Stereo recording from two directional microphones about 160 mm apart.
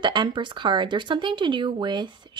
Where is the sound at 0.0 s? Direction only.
30° right (ahead or behind).